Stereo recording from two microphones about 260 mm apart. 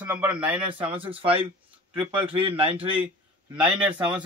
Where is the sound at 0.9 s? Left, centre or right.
Right.